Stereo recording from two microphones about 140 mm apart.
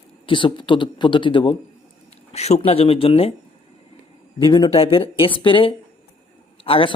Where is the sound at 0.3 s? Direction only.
35° left (ahead or behind).